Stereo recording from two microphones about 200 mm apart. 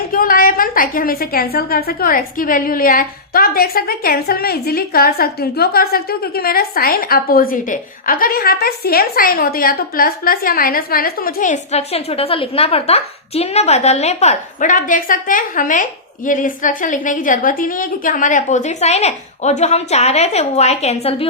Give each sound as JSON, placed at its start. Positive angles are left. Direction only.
{"t": 0.1, "sound": "a woman's voice", "side_deg": 45}